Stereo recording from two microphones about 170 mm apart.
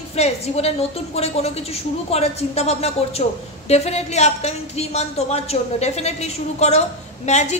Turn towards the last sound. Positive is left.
turn(degrees=40)  # may be behind; listen again after turning